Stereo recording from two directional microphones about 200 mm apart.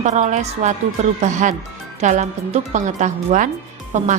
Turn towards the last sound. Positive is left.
turn(degrees=-35)  # may be behind; listen again after turning